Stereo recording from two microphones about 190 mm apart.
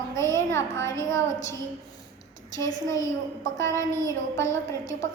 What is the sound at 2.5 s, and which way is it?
A woman's voice, 15° left (ahead or behind).